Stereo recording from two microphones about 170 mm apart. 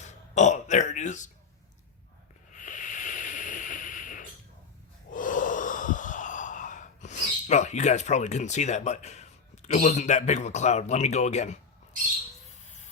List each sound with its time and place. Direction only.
0.0 s burping: 45° left (ahead or behind)
2.6 s a sound: 45° left (ahead or behind)
5.1 s gasp: 50° left (ahead or behind)
9.8 s speech: 45° left (ahead or behind)